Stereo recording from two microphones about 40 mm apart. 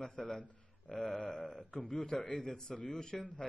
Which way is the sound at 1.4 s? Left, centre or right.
Left.